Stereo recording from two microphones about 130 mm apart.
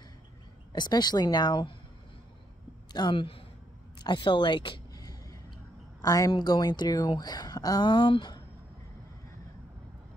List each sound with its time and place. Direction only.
0.7 s speech: 35° left (ahead or behind)
2.9 s speech: 35° left (ahead or behind)
4.0 s a sound: 35° left (ahead or behind)
6.0 s speech: 30° left (ahead or behind)